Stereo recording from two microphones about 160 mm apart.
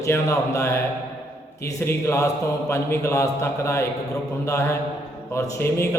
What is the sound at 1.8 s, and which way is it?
Mantra, 15° left (ahead or behind).